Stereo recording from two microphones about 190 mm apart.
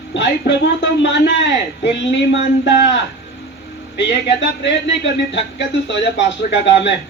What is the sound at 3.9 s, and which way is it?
A man's voice, 70° left (ahead or behind).